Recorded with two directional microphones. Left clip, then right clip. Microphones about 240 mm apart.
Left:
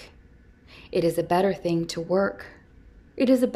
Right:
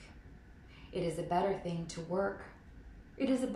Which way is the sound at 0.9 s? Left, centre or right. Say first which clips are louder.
Left 12 dB; left.